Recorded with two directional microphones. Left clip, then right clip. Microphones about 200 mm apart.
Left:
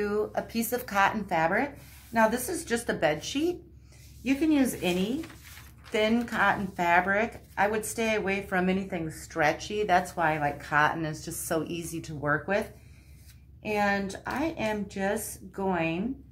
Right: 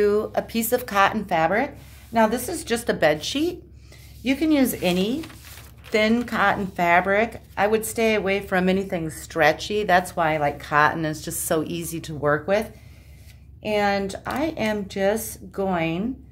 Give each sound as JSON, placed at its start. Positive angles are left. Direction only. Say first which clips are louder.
{"t": 0.0, "sound": "speech", "louder": "right 8 dB", "side_deg": -40}